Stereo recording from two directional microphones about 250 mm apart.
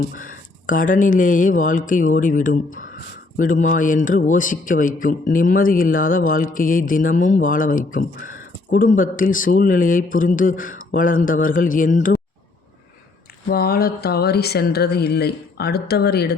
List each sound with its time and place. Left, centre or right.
0.1 s a man's voice: left
13.5 s a man's voice: left